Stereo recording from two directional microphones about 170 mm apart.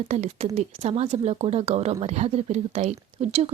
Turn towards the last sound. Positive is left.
turn(degrees=-35)  # may be behind; listen again after turning